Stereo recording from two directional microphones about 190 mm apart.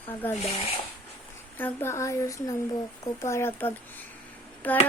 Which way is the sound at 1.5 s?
10° left (ahead or behind).